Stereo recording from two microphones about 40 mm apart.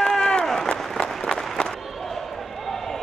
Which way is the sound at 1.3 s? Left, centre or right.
Centre.